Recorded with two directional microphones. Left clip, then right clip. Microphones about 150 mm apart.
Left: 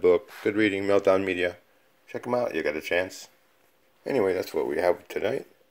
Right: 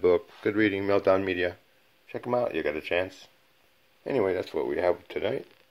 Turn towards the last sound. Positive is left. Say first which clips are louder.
# left 2 dB
turn(degrees=5)  # may be behind; listen again after turning